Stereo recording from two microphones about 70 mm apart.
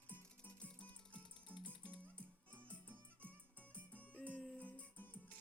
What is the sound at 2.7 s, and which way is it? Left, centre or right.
Music, left.